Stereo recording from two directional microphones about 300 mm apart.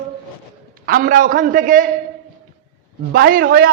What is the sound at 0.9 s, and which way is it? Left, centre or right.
A man's voice, right.